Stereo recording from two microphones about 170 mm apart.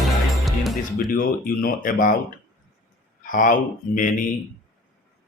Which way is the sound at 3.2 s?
50° left (ahead or behind).